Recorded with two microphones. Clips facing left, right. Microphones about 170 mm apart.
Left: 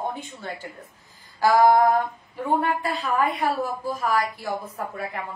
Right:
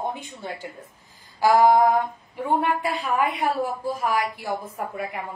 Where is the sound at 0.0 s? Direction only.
20° right (ahead or behind).